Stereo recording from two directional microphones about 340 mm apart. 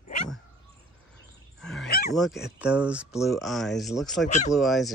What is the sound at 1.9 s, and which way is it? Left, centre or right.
Speech, left.